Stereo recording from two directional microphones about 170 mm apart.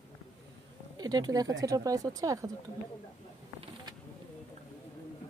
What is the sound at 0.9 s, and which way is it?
Speech, 25° right (ahead or behind).